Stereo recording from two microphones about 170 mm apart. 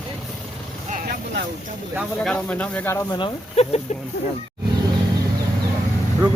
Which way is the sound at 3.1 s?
30° left (ahead or behind).